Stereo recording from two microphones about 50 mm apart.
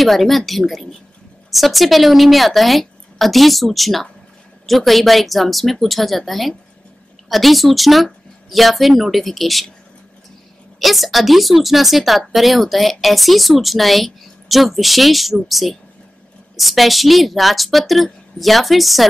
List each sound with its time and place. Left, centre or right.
0.0 s speech: centre
10.8 s speech: centre